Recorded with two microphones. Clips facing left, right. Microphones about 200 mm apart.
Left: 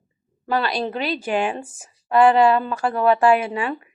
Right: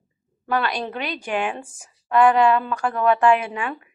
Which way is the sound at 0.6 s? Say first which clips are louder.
Left 3 dB; 35° left (ahead or behind).